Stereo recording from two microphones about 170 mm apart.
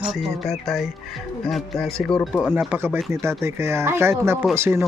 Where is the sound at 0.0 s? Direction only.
Centre (ahead or behind).